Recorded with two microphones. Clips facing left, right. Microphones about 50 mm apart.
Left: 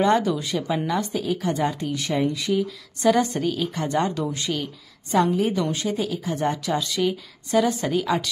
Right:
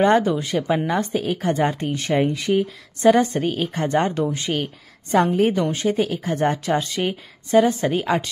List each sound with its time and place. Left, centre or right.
0.0 s a woman's voice: right
5.1 s a woman's voice: right